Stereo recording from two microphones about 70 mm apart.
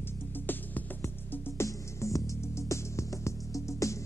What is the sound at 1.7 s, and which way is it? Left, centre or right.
Music, left.